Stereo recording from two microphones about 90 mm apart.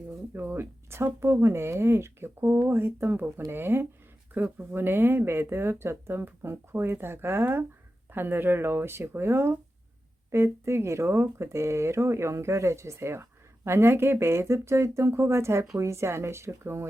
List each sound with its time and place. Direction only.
0.3 s speech: 25° right (ahead or behind)